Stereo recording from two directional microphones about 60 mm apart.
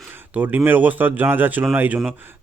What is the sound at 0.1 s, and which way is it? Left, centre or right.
Speech, right.